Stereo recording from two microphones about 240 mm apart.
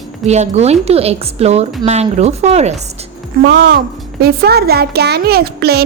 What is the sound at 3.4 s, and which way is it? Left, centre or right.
A child's voice, right.